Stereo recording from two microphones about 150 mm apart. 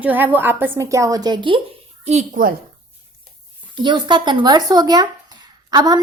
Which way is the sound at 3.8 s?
30° right (ahead or behind).